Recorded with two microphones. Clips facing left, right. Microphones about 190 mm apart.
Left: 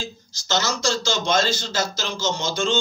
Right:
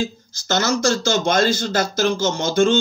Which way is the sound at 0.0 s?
55° right (ahead or behind).